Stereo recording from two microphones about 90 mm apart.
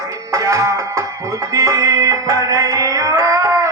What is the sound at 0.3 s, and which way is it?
Music, 35° right (ahead or behind).